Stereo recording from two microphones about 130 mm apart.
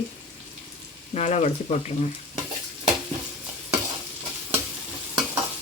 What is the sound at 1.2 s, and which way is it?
Speech, 60° left (ahead or behind).